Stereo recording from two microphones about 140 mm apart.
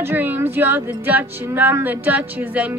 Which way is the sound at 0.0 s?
15° right (ahead or behind).